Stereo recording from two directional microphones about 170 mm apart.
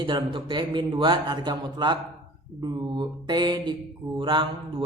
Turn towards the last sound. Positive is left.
turn(degrees=-30)  # may be behind; listen again after turning